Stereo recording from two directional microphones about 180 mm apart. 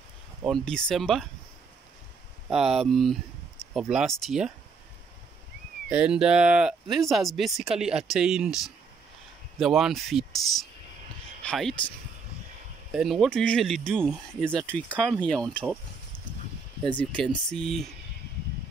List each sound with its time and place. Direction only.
0.5 s speech: 5° left (ahead or behind)
2.4 s speech: centre (ahead or behind)
5.9 s speech: 5° right (ahead or behind)
11.4 s speech: 5° left (ahead or behind)
12.9 s speech: centre (ahead or behind)
16.8 s speech: 5° left (ahead or behind)